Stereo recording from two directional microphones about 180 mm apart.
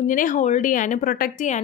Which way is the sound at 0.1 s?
45° left (ahead or behind).